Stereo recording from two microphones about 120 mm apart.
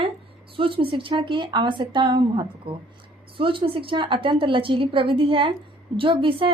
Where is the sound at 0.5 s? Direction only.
45° right (ahead or behind).